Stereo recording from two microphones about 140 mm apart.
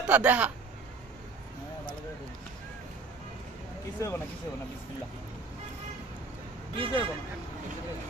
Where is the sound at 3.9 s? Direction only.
20° left (ahead or behind).